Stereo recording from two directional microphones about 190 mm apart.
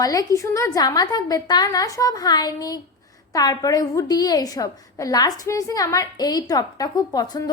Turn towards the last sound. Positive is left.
turn(degrees=20)  # may be behind; listen again after turning